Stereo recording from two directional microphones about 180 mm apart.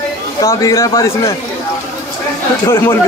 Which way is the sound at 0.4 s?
15° left (ahead or behind).